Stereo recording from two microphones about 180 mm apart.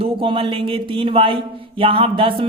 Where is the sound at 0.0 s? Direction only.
30° right (ahead or behind).